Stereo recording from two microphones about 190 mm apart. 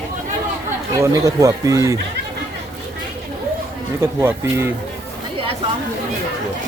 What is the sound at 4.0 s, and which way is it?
Speech, 10° right (ahead or behind).